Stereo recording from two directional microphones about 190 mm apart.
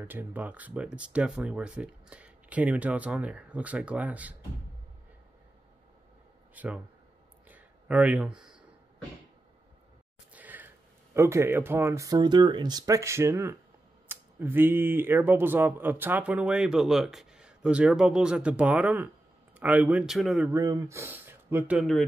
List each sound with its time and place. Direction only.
0.0 s speech: 10° right (ahead or behind)
6.5 s speech: 10° right (ahead or behind)
7.4 s a sound: 10° right (ahead or behind)
10.3 s a sound: 10° right (ahead or behind)
11.1 s a man's voice: 15° right (ahead or behind)
20.5 s speech: 20° right (ahead or behind); by 22.0 s centre (ahead or behind)